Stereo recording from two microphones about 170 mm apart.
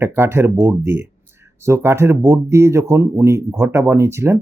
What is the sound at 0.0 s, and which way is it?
Speech, 15° right (ahead or behind).